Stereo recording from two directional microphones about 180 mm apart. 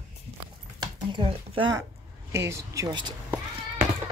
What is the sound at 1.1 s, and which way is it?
Speech, 30° right (ahead or behind).